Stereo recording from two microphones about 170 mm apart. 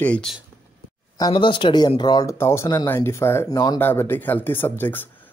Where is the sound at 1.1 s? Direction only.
25° left (ahead or behind).